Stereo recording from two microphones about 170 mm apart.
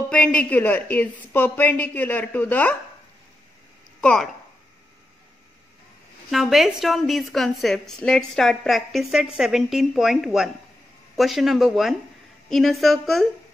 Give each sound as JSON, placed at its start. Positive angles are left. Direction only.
{"t": 0.1, "sound": "a woman's voice", "side_deg": 5}
{"t": 4.0, "sound": "a woman's voice", "side_deg": 5}
{"t": 6.3, "sound": "a woman's voice", "side_deg": 0}